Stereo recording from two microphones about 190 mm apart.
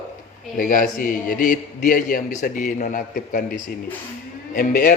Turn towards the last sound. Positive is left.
turn(degrees=50)  # may be behind; listen again after turning